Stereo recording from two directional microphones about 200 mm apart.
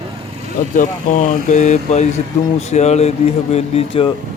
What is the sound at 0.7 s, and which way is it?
Speech, 40° left (ahead or behind).